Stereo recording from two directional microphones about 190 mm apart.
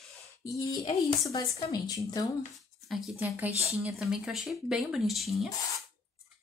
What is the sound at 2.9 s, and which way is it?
Speech, centre (ahead or behind).